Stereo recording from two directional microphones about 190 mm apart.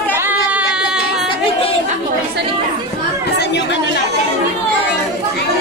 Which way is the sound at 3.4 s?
65° left (ahead or behind).